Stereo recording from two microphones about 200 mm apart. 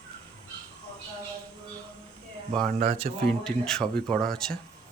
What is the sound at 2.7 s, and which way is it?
Speech, 30° right (ahead or behind).